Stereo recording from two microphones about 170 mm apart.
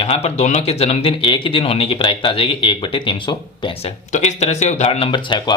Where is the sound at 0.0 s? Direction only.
35° left (ahead or behind).